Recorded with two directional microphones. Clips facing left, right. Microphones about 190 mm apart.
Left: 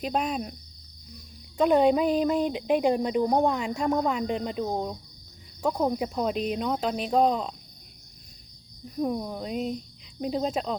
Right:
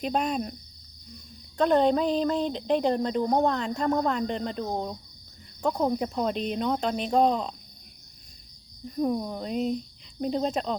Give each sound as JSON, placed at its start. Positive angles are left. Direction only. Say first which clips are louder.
{"t": 0.0, "sound": "speech", "louder": "right 1 dB", "side_deg": 0}
{"t": 1.5, "sound": "speech", "louder": "left 1 dB", "side_deg": 10}
{"t": 9.0, "sound": "speech", "louder": "right 1 dB", "side_deg": 0}